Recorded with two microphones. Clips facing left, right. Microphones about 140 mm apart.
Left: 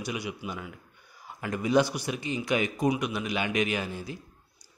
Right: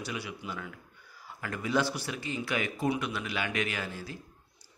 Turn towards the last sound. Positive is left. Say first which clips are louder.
# left 5 dB
turn(degrees=20)  # may be behind; listen again after turning